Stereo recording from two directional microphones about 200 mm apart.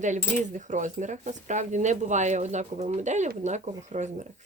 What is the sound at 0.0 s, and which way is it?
Speech, 40° right (ahead or behind).